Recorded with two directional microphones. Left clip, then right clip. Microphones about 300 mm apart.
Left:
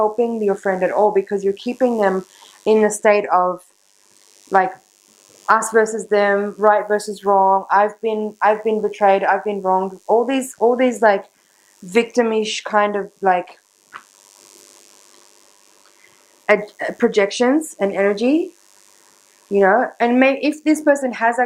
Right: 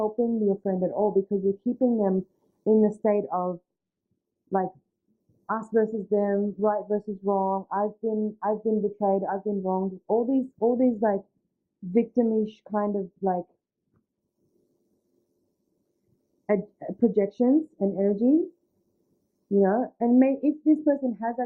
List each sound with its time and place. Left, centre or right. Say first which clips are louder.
0.0 s speech: left 9 dB; left
0.4 s speech: left 8 dB; centre
7.3 s speech: left 12 dB; centre
10.2 s speech: left 8 dB; centre
16.5 s speech: left 11 dB; centre
19.5 s speech: left 9 dB; centre